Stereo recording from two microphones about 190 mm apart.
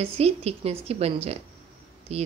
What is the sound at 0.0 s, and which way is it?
Speech, 35° right (ahead or behind).